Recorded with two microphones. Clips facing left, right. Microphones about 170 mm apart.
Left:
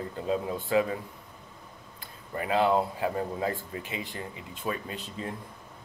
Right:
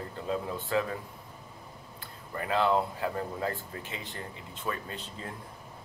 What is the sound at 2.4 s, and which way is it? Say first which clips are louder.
Speech: left 2 dB; 20° left (ahead or behind).